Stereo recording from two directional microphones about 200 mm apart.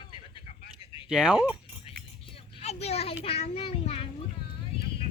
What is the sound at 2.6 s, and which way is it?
Children playing, 30° left (ahead or behind).